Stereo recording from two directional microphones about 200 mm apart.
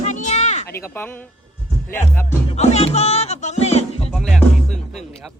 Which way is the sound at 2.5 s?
35° left (ahead or behind).